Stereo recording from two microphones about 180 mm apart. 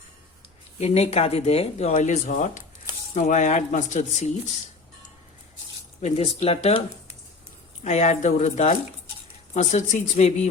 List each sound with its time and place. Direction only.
0.8 s speech: 35° left (ahead or behind)
6.0 s speech: 35° left (ahead or behind)
7.9 s speech: 40° left (ahead or behind)